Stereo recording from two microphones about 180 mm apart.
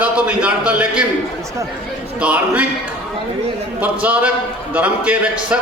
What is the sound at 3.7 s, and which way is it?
Speech, 10° right (ahead or behind).